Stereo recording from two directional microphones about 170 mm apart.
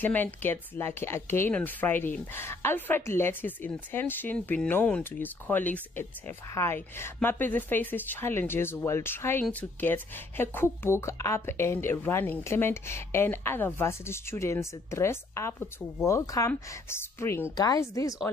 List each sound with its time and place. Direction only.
0.0 s a woman's voice: 10° left (ahead or behind)